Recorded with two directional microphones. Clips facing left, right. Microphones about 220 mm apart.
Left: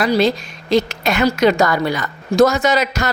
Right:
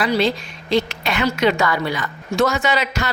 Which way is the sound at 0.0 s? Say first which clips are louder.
Left 3 dB; 40° left (ahead or behind).